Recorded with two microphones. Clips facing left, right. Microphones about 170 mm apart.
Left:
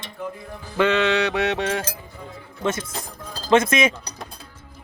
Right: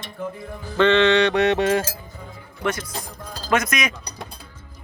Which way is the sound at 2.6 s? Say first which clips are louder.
Left 1 dB; 25° left (ahead or behind).